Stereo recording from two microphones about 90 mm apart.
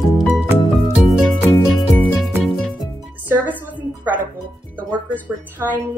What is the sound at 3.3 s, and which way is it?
Music, 20° right (ahead or behind).